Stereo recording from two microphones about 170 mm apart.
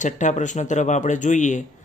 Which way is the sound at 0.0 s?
45° left (ahead or behind).